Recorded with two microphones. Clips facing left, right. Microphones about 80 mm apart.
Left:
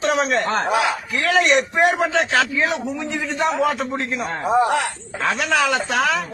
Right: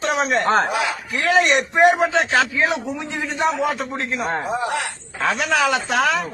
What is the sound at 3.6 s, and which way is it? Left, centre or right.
A man's voice, centre.